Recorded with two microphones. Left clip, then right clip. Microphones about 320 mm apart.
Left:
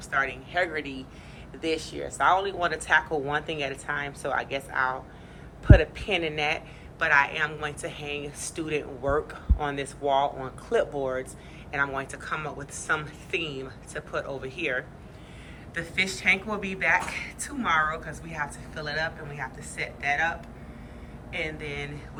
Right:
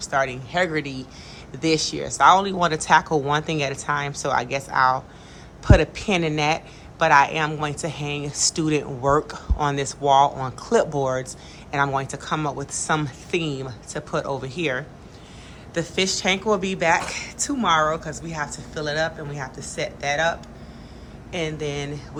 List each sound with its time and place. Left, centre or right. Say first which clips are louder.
0.1 s a woman's voice: right 4 dB; centre
21.3 s a woman's voice: right 5 dB; centre